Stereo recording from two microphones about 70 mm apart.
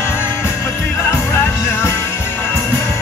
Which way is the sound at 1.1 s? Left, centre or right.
Left.